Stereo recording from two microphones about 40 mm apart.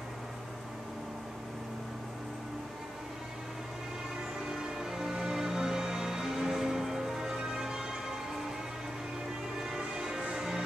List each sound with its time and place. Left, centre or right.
4.5 s music: centre
9.7 s music: centre